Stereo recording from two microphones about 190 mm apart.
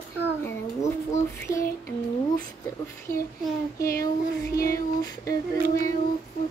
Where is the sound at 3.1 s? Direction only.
45° left (ahead or behind).